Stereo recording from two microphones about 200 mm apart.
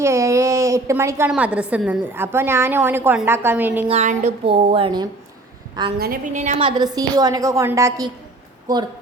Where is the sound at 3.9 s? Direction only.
35° right (ahead or behind).